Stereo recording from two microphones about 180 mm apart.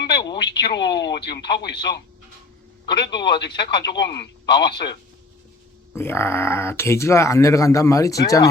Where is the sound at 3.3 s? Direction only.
70° left (ahead or behind).